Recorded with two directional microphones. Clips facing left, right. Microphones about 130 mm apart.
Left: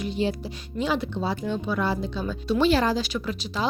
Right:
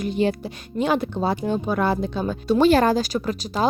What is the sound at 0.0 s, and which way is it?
Speech, 55° right (ahead or behind).